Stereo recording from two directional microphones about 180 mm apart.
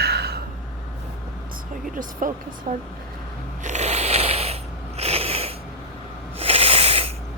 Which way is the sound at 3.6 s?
40° right (ahead or behind).